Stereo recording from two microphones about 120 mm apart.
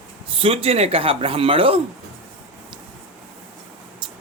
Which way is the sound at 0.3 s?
50° right (ahead or behind).